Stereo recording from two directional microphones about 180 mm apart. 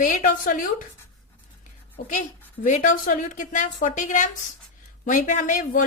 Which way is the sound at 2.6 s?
45° left (ahead or behind).